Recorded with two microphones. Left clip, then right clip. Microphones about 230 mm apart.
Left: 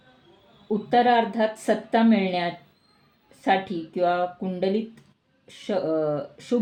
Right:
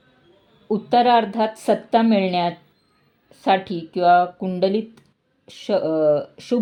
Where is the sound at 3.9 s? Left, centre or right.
Right.